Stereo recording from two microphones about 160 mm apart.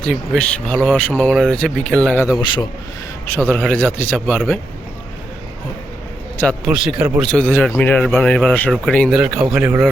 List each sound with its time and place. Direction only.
0.0 s speech: 5° left (ahead or behind)
2.2 s a man's voice: 25° left (ahead or behind)
3.2 s speech: 10° left (ahead or behind)
6.3 s a man's voice: 10° left (ahead or behind)
6.7 s speech: 5° right (ahead or behind)
9.5 s speech: 10° right (ahead or behind)